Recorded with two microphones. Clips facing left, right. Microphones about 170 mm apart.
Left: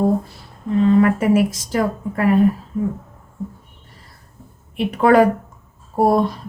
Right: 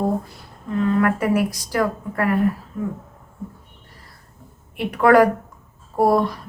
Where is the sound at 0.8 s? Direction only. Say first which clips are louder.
Left 4 dB; 25° left (ahead or behind).